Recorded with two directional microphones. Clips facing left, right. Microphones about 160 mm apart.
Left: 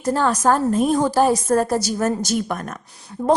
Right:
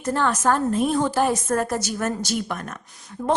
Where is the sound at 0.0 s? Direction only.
35° left (ahead or behind).